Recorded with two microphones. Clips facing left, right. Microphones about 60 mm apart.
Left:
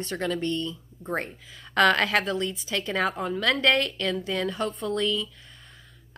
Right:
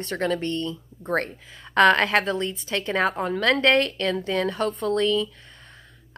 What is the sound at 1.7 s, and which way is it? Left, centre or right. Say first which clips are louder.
A woman's voice: right 3 dB; right.